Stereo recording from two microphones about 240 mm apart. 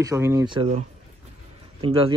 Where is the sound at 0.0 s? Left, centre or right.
Centre.